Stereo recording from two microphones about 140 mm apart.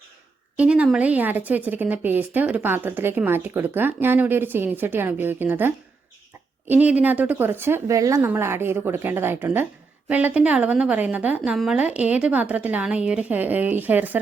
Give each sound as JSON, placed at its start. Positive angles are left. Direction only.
{"t": 0.5, "sound": "a woman's voice", "side_deg": -10}